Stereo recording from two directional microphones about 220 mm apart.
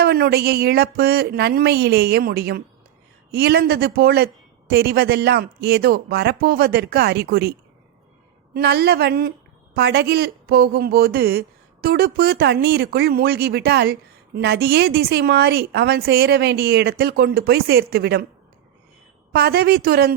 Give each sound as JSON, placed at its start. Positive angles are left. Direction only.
{"t": 0.0, "sound": "a woman's voice", "side_deg": -45}
{"t": 8.5, "sound": "a woman's voice", "side_deg": -45}
{"t": 19.3, "sound": "a woman's voice", "side_deg": -45}